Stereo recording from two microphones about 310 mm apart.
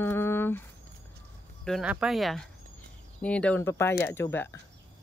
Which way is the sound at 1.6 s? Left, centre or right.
Centre.